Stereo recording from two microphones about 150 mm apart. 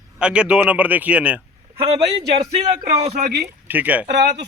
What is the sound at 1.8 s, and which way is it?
Speech, 40° right (ahead or behind).